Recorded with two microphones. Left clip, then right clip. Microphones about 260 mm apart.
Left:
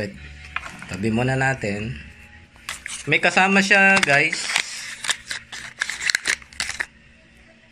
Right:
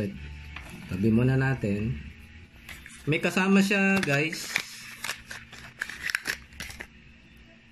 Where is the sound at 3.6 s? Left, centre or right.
Left.